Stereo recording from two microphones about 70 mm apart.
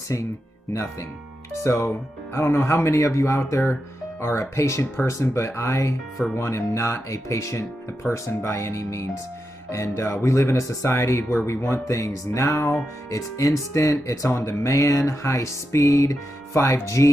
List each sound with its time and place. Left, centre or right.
0.1 s music: left
1.6 s music: left
10.9 s speech: left
11.9 s music: left